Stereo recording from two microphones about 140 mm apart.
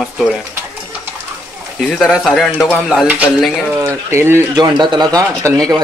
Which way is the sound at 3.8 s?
20° right (ahead or behind).